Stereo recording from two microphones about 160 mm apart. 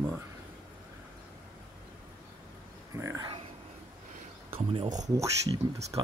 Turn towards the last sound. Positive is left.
turn(degrees=-30)  # may be behind; listen again after turning